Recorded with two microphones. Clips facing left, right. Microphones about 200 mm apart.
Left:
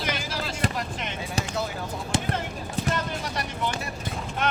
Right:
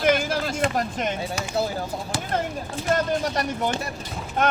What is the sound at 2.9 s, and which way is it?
Speech, 45° right (ahead or behind).